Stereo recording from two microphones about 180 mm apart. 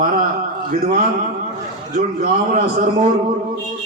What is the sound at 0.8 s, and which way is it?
A man's voice, 50° right (ahead or behind).